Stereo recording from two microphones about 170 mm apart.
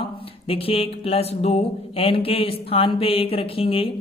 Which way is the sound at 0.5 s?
35° left (ahead or behind).